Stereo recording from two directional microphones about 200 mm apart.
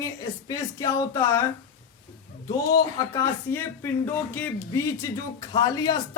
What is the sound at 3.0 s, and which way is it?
A man's voice, 15° left (ahead or behind).